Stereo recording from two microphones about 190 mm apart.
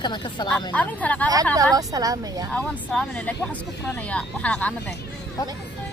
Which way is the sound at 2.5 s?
5° left (ahead or behind).